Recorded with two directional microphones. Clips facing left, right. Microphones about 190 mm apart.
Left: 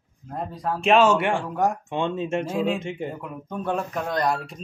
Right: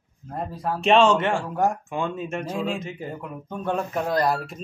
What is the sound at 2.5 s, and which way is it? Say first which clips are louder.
Speech: left 3 dB; 5° left (ahead or behind).